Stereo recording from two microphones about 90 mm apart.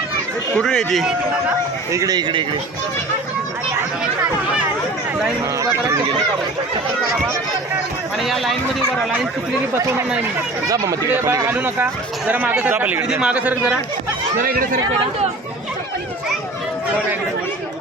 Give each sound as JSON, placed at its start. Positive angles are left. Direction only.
{"t": 0.5, "sound": "speech", "side_deg": 5}
{"t": 1.9, "sound": "speech", "side_deg": -35}
{"t": 2.1, "sound": "speech", "side_deg": -55}
{"t": 8.2, "sound": "speech", "side_deg": 0}
{"t": 10.7, "sound": "speech", "side_deg": -40}
{"t": 11.4, "sound": "speech", "side_deg": -25}